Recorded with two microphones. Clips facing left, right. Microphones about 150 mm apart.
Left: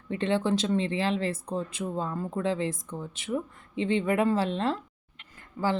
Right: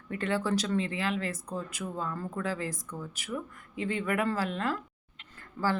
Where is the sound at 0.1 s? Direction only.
25° left (ahead or behind).